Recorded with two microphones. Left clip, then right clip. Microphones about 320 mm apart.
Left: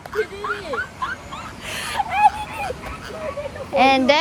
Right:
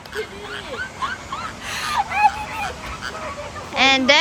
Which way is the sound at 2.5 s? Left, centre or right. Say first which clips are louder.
Right 1 dB; right.